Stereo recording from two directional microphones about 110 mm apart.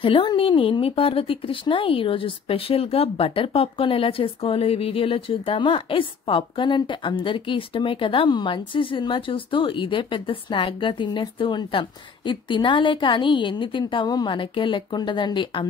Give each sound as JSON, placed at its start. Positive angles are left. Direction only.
{"t": 0.0, "sound": "speech", "side_deg": 50}